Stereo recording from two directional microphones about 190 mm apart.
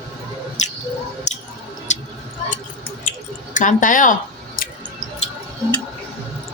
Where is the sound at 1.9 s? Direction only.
40° left (ahead or behind).